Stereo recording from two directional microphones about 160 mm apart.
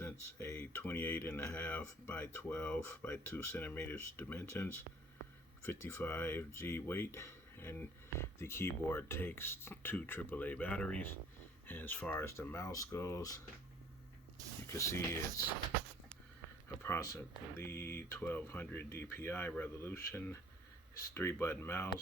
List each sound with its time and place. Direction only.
0.0 s speech: 20° left (ahead or behind)
14.7 s speech: 15° left (ahead or behind)
16.6 s speech: 15° left (ahead or behind)